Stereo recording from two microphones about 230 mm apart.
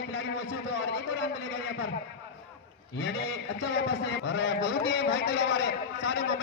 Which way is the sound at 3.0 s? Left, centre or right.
Left.